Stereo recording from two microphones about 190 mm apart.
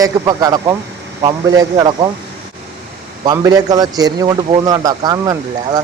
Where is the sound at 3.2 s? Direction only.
20° right (ahead or behind).